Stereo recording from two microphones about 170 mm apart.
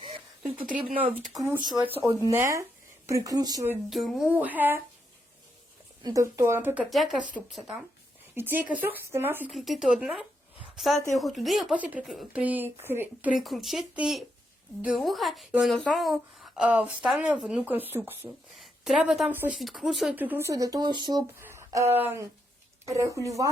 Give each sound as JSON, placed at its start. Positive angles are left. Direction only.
{"t": 0.9, "sound": "speech", "side_deg": -10}
{"t": 3.8, "sound": "speech", "side_deg": 0}
{"t": 6.0, "sound": "speech", "side_deg": -20}
{"t": 6.9, "sound": "speech", "side_deg": 0}
{"t": 9.5, "sound": "a woman's voice", "side_deg": 0}
{"t": 13.3, "sound": "a woman's voice", "side_deg": 0}
{"t": 19.5, "sound": "speech", "side_deg": 0}
{"t": 21.4, "sound": "a sound", "side_deg": -15}
{"t": 21.9, "sound": "speech", "side_deg": -15}